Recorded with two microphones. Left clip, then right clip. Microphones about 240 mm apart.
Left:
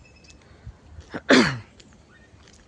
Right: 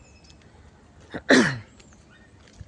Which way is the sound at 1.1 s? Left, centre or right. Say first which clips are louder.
Left 1 dB; centre.